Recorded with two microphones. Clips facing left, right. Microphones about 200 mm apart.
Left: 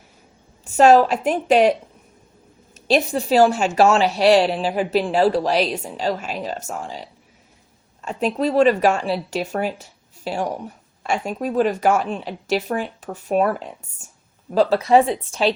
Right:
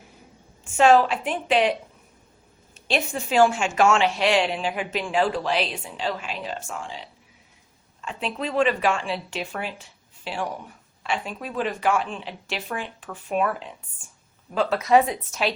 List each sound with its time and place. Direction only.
0.6 s a woman's voice: 40° left (ahead or behind)
2.7 s a woman's voice: 40° left (ahead or behind)